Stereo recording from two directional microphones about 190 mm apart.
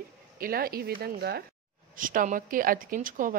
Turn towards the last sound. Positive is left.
turn(degrees=-45)  # may be behind; listen again after turning